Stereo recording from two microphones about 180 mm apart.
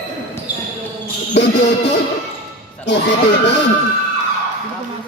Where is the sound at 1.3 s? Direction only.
70° left (ahead or behind).